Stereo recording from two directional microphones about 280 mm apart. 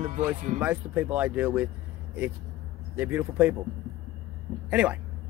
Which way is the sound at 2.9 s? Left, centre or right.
Centre.